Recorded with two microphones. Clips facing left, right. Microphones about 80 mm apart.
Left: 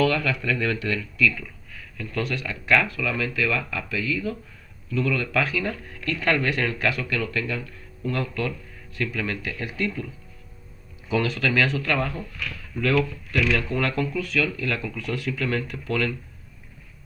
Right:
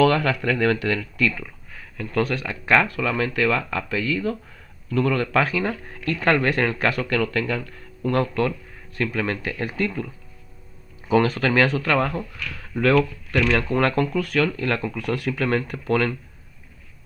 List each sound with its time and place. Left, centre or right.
0.0 s speech: right
11.1 s speech: right